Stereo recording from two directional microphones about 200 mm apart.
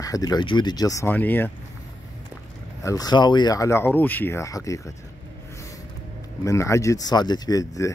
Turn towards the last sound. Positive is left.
turn(degrees=15)  # may be behind; listen again after turning